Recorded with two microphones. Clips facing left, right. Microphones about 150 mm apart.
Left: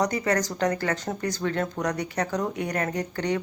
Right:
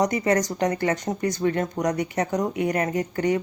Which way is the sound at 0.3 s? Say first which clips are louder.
Right 3 dB; 20° right (ahead or behind).